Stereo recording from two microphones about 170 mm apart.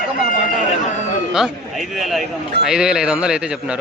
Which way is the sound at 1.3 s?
Centre (ahead or behind).